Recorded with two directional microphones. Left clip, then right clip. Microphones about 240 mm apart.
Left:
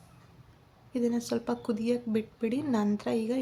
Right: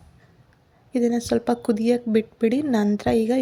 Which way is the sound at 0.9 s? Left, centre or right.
Right.